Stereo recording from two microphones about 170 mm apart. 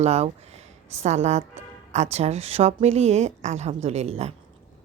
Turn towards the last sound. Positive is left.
turn(degrees=-35)  # may be behind; listen again after turning